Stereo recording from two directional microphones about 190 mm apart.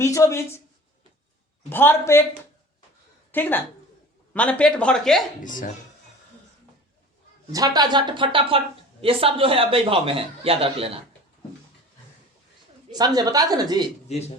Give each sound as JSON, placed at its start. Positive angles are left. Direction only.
{"t": 0.0, "sound": "speech", "side_deg": 15}
{"t": 1.7, "sound": "speech", "side_deg": 10}
{"t": 3.3, "sound": "a woman's voice", "side_deg": 10}
{"t": 5.4, "sound": "speech", "side_deg": 45}
{"t": 7.5, "sound": "speech", "side_deg": -20}
{"t": 12.9, "sound": "speech", "side_deg": -20}